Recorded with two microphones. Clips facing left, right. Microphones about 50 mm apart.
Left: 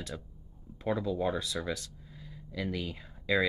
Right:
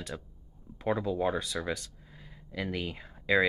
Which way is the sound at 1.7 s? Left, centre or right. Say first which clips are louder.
Right 1 dB; right.